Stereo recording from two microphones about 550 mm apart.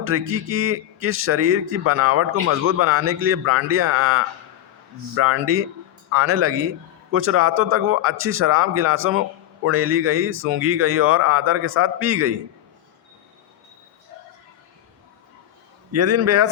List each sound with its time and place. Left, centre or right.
0.0 s a man's voice: right
15.9 s a man's voice: right